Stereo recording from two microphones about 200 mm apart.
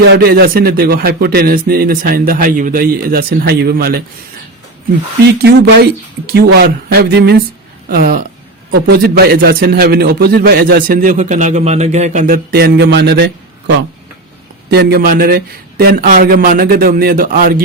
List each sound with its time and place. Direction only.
0.1 s a man's voice: 50° right (ahead or behind)
5.2 s a man's voice: 55° right (ahead or behind)